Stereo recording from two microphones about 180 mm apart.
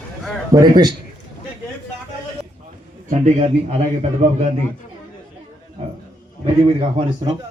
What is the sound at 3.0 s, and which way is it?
A man's voice, 40° right (ahead or behind).